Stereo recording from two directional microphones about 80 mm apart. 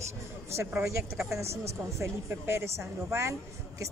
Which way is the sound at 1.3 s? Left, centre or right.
Right.